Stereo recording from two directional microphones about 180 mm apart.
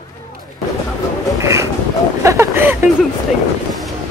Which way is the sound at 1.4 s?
15° right (ahead or behind).